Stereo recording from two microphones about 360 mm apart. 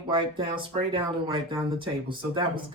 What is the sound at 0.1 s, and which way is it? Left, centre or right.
Speech, centre.